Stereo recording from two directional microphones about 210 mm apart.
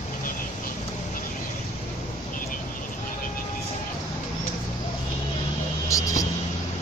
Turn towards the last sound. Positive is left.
turn(degrees=15)  # may be behind; listen again after turning